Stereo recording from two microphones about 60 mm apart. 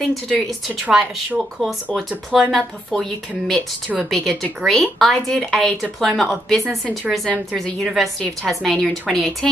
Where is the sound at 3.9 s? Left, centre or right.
Centre.